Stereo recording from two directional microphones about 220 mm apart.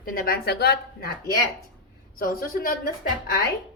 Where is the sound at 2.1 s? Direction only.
40° left (ahead or behind).